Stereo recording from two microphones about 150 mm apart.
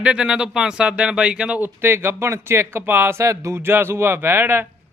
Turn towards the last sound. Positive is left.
turn(degrees=-15)  # may be behind; listen again after turning